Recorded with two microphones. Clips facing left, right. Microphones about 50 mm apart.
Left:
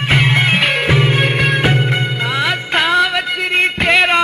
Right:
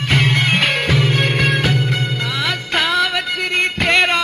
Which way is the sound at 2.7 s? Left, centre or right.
Centre.